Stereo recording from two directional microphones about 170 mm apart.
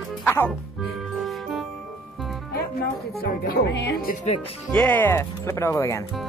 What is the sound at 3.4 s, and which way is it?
Speech, 70° left (ahead or behind).